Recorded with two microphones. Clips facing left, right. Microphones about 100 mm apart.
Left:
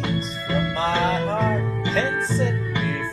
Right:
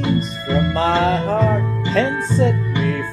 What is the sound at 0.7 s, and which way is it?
Music, 65° right (ahead or behind).